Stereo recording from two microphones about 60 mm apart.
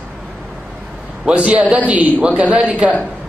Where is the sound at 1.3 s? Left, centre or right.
Right.